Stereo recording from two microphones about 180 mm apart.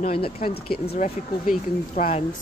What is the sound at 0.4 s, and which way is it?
Speech, 55° left (ahead or behind).